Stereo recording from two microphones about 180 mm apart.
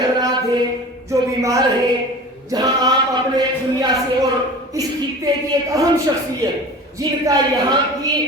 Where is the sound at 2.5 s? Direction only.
20° right (ahead or behind).